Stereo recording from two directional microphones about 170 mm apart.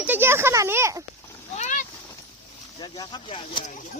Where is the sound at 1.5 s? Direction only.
45° left (ahead or behind).